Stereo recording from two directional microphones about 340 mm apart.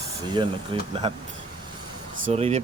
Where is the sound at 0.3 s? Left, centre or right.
Centre.